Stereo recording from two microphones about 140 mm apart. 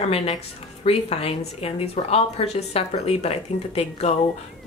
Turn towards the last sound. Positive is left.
turn(degrees=45)  # may be behind; listen again after turning